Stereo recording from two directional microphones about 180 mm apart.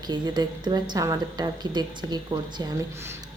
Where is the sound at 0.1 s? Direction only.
25° right (ahead or behind).